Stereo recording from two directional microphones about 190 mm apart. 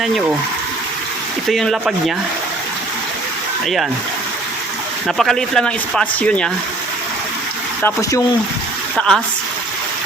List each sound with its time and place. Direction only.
1.5 s speech: centre (ahead or behind)
5.0 s speech: centre (ahead or behind)
7.8 s speech: 10° left (ahead or behind)